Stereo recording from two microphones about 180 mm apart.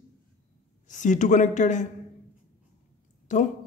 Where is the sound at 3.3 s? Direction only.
40° left (ahead or behind).